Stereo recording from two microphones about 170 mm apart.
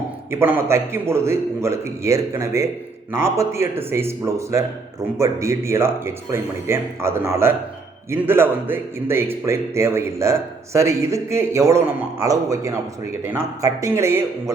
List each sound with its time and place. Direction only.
0.3 s a man's voice: 15° right (ahead or behind)